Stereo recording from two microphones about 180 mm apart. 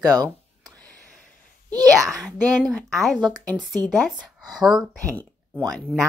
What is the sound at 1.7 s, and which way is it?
Speech, centre (ahead or behind).